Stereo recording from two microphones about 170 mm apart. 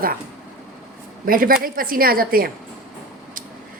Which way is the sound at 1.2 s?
55° right (ahead or behind).